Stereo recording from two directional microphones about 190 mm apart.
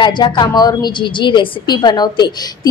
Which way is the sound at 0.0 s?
20° left (ahead or behind).